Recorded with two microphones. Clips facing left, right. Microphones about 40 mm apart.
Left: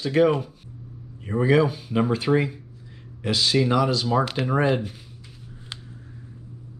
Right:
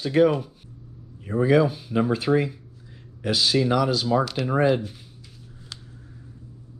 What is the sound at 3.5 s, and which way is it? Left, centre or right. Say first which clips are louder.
Speech: left 1 dB; left.